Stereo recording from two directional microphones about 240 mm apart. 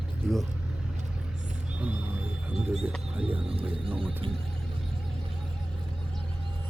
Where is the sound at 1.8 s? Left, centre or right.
Centre.